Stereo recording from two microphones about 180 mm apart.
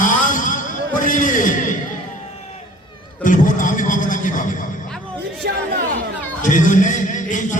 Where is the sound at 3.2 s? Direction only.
45° left (ahead or behind).